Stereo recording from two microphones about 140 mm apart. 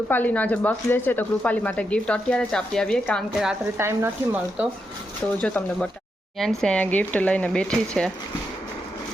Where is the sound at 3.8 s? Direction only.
15° right (ahead or behind).